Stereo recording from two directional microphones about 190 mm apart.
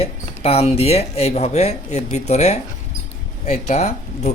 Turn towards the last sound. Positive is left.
turn(degrees=35)  # may be behind; listen again after turning